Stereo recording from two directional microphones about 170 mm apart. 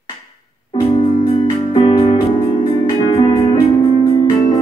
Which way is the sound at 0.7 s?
25° left (ahead or behind).